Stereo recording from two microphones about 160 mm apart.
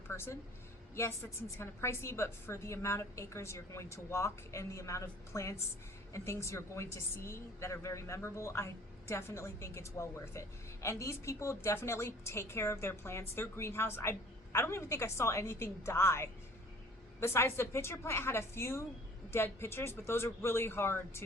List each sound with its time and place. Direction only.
0.1 s a woman's voice: 15° left (ahead or behind)